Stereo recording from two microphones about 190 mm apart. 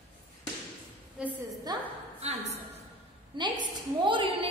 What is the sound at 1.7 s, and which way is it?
Speech, 20° right (ahead or behind).